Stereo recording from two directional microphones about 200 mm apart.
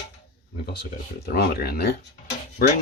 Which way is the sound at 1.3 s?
50° left (ahead or behind).